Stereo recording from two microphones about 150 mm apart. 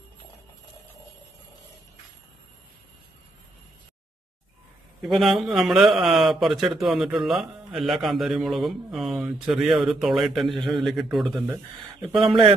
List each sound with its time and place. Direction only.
5.0 s a man's voice: centre (ahead or behind)
12.2 s speech: 30° right (ahead or behind)